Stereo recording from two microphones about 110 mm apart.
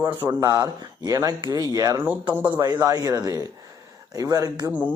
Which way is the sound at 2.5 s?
35° right (ahead or behind).